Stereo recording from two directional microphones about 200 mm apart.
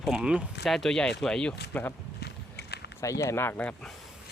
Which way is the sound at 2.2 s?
55° left (ahead or behind).